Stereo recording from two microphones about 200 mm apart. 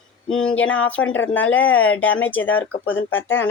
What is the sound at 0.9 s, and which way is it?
Speech, 75° left (ahead or behind).